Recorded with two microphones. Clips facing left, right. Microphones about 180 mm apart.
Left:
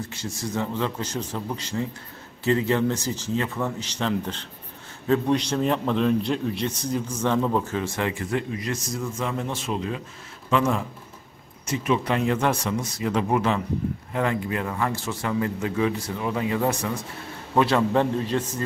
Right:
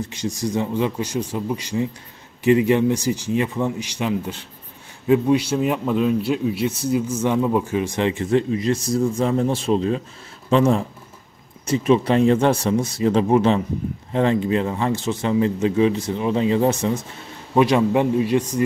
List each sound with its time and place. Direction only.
0.1 s a man's voice: 15° right (ahead or behind)